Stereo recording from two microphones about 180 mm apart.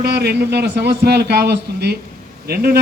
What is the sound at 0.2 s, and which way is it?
A man's voice, 65° right (ahead or behind).